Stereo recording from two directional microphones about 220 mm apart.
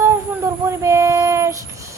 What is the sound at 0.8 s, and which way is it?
Speech, 15° right (ahead or behind).